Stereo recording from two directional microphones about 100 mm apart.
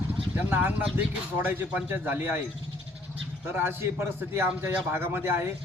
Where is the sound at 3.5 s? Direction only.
20° right (ahead or behind).